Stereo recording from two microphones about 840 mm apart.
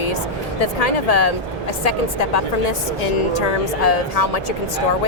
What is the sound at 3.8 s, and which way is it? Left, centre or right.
Speech, left.